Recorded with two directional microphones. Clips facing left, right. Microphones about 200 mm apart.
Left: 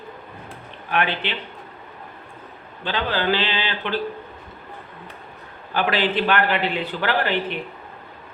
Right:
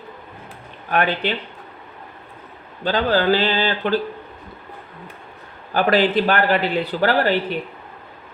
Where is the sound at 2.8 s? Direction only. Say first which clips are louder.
Right 6 dB; 40° right (ahead or behind).